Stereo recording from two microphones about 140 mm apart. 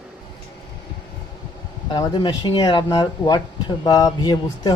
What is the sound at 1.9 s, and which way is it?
Speech, 30° left (ahead or behind).